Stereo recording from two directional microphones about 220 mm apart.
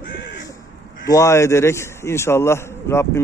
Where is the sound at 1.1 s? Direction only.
15° left (ahead or behind).